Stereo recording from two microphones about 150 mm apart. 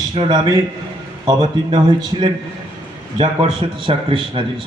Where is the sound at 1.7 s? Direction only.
30° right (ahead or behind).